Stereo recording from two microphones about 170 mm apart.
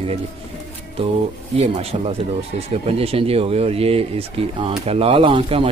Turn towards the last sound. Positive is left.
turn(degrees=-30)  # may be behind; listen again after turning